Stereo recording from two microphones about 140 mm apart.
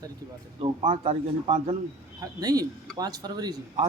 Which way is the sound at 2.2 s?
25° right (ahead or behind).